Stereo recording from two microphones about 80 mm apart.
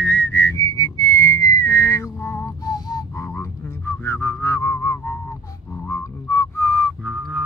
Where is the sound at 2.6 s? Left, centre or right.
Left.